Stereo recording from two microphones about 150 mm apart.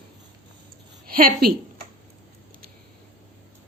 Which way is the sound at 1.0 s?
80° right.